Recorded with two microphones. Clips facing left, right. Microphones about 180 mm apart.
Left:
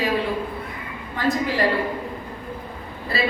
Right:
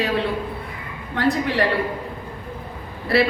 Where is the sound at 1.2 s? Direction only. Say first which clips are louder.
Right 2 dB; 70° right (ahead or behind).